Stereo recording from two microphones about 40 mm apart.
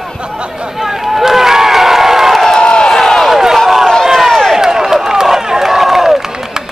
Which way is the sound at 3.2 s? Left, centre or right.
Centre.